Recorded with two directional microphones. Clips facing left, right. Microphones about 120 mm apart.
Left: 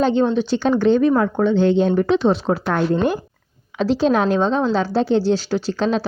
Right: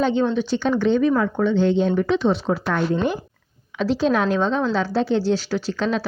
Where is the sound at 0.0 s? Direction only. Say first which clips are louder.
Left 3 dB; 35° left (ahead or behind).